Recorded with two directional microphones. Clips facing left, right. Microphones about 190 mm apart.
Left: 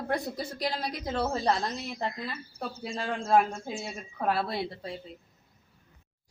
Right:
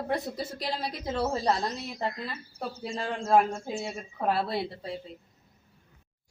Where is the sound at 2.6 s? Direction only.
Centre (ahead or behind).